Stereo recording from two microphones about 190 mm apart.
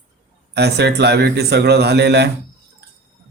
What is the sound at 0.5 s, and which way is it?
Speech, 60° right (ahead or behind).